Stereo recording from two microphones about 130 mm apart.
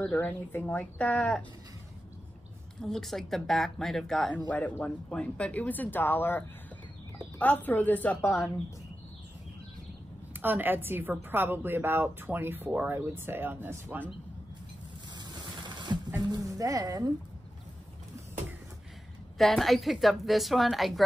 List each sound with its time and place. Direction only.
0.0 s speech: 15° left (ahead or behind)
2.8 s speech: centre (ahead or behind)
10.4 s a woman's voice: 15° right (ahead or behind)
15.1 s printer: 35° right (ahead or behind)
16.3 s speech: 25° right (ahead or behind)
19.3 s a woman's voice: centre (ahead or behind)